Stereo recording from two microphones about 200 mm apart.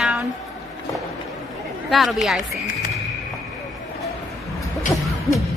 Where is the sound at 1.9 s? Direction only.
Centre (ahead or behind).